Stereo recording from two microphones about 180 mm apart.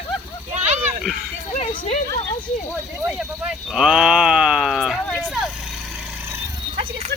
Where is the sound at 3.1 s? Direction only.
5° right (ahead or behind).